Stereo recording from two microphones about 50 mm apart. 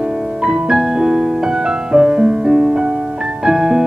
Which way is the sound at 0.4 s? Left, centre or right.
Centre.